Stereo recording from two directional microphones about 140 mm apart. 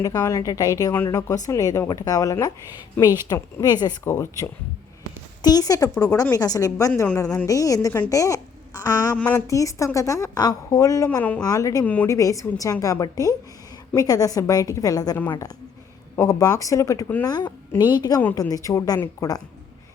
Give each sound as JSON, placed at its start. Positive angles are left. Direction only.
{"t": 0.0, "sound": "a woman's voice", "side_deg": 25}
{"t": 9.1, "sound": "speech", "side_deg": 10}
{"t": 9.5, "sound": "a woman's voice", "side_deg": 25}
{"t": 11.2, "sound": "speech", "side_deg": 10}
{"t": 11.4, "sound": "a woman's voice", "side_deg": 25}
{"t": 15.2, "sound": "speech", "side_deg": 15}
{"t": 16.1, "sound": "a woman's voice", "side_deg": 25}